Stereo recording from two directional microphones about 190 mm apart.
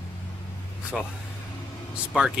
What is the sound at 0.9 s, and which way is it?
Speech, centre (ahead or behind).